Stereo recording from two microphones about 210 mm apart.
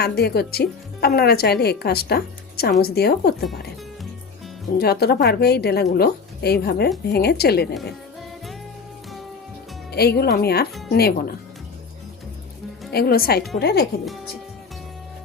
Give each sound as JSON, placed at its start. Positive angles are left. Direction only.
{"t": 0.0, "sound": "speech", "side_deg": 50}
{"t": 4.8, "sound": "speech", "side_deg": 50}
{"t": 9.9, "sound": "speech", "side_deg": 50}
{"t": 12.9, "sound": "speech", "side_deg": 50}